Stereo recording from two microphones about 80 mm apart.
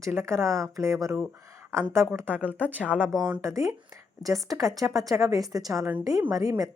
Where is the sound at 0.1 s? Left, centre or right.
Right.